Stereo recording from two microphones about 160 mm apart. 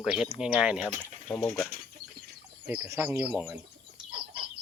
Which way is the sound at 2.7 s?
15° right (ahead or behind).